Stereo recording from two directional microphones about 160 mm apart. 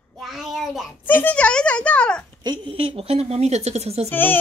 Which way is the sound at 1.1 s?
10° left (ahead or behind).